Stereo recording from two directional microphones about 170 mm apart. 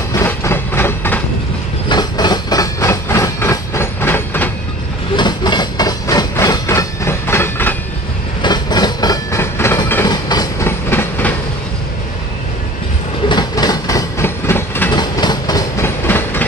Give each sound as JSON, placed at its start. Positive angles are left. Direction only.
{"t": 0.1, "sound": "train", "side_deg": 15}
{"t": 1.9, "sound": "a sound", "side_deg": 25}
{"t": 5.1, "sound": "train", "side_deg": 25}
{"t": 8.4, "sound": "train", "side_deg": 25}
{"t": 10.0, "sound": "a sound", "side_deg": 25}
{"t": 10.9, "sound": "train", "side_deg": 10}
{"t": 13.3, "sound": "train", "side_deg": 25}
{"t": 14.9, "sound": "train", "side_deg": 25}